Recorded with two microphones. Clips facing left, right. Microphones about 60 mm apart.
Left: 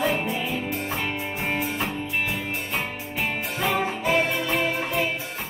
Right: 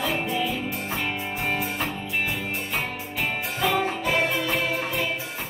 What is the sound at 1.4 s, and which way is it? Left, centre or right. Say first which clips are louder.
Music: even; centre.